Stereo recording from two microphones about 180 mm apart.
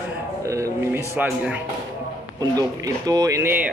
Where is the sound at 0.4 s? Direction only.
15° right (ahead or behind).